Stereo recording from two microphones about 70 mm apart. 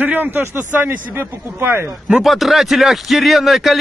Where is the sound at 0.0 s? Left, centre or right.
Right.